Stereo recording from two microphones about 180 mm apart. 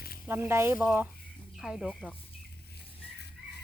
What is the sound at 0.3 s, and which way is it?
Speech, 15° right (ahead or behind).